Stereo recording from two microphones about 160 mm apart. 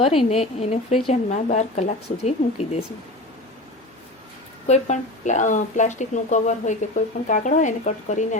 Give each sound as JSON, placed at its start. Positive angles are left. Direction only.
{"t": 0.0, "sound": "speech", "side_deg": 40}
{"t": 4.6, "sound": "speech", "side_deg": 45}